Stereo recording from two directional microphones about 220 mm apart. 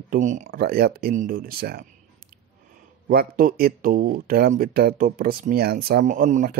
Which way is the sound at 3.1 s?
40° right (ahead or behind).